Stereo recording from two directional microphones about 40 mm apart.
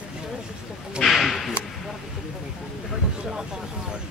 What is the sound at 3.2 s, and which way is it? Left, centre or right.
Speech, centre.